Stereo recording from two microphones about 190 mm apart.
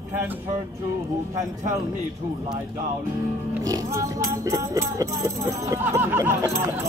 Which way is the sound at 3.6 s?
20° right (ahead or behind).